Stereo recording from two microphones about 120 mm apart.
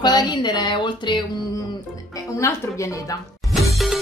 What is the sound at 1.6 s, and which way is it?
Music, 25° left (ahead or behind).